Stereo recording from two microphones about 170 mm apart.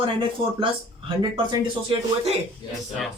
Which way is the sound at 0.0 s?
30° right (ahead or behind).